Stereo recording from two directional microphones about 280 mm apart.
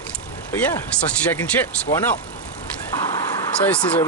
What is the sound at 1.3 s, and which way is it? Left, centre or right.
Speech, centre.